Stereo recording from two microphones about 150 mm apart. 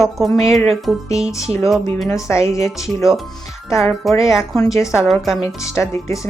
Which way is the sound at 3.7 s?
Centre (ahead or behind).